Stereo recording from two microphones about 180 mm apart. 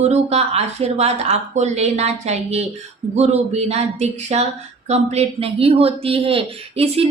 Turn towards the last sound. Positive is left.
turn(degrees=-35)  # may be behind; listen again after turning